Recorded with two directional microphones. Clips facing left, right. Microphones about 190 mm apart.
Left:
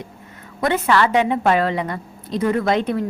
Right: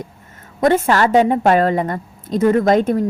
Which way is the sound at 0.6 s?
45° right (ahead or behind).